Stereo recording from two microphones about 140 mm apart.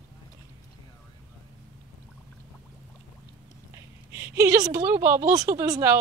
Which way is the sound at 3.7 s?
15° right (ahead or behind).